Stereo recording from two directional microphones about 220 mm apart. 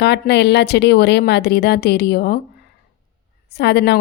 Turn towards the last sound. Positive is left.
turn(degrees=50)  # may be behind; listen again after turning